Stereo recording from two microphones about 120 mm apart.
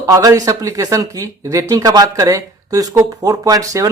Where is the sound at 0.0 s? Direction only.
30° right (ahead or behind).